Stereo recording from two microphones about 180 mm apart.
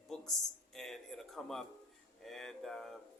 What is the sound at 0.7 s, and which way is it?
Speech, centre (ahead or behind).